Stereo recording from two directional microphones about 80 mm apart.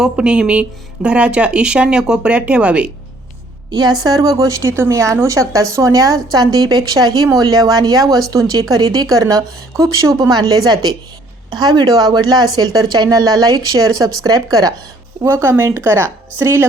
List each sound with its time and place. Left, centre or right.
0.0 s speech: centre
3.7 s a woman's voice: right
6.3 s a woman's voice: right
15.2 s speech: right